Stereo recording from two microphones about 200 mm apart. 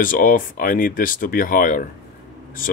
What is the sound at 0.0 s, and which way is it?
Speech, 45° left (ahead or behind).